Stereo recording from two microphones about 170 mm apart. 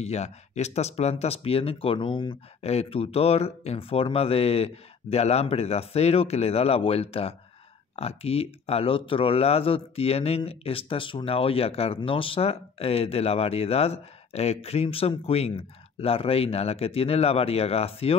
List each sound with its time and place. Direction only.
0.0 s speech: 40° left (ahead or behind)